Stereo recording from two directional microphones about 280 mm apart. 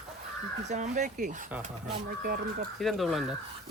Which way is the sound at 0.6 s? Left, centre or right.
Right.